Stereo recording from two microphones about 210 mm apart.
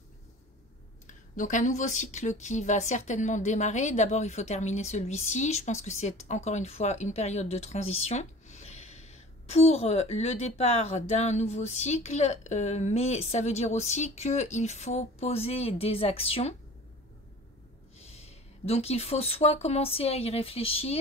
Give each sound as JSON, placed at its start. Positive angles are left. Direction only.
{"t": 1.0, "sound": "speech", "side_deg": 40}
{"t": 17.9, "sound": "speech", "side_deg": 30}